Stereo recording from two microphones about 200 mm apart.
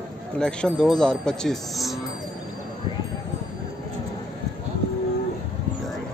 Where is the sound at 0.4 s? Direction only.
5° left (ahead or behind).